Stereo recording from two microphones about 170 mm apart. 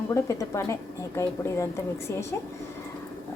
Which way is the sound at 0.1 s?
20° left (ahead or behind).